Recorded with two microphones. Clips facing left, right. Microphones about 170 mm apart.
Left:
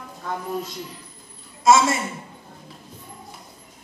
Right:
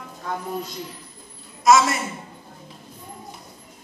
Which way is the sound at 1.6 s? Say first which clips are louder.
Even; 25° left (ahead or behind).